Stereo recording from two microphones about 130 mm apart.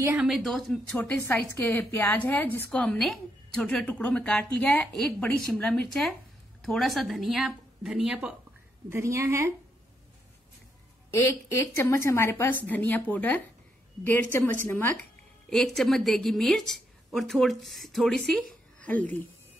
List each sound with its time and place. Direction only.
0.2 s a woman's voice: centre (ahead or behind)
0.9 s a woman's voice: 15° left (ahead or behind); by 8.4 s 10° right (ahead or behind)
8.8 s a woman's voice: 20° right (ahead or behind)
11.1 s a woman's voice: 20° left (ahead or behind)
15.5 s a woman's voice: centre (ahead or behind)